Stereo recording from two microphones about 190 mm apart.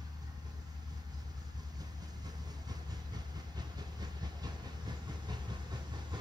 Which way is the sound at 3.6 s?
20° right (ahead or behind).